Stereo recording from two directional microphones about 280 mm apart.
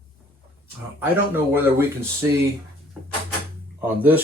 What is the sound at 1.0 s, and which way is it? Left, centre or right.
Speech, centre.